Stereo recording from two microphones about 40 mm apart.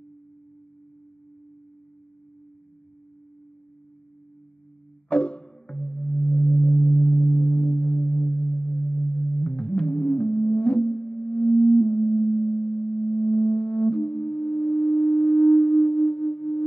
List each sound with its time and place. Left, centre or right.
5.1 s singing bowl: left
11.5 s sine wave: centre
11.9 s singing bowl: left